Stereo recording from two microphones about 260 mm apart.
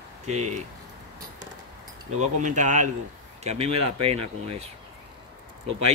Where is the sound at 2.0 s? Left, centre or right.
Right.